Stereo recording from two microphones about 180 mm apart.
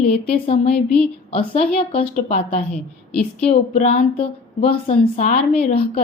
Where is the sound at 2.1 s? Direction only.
45° left (ahead or behind).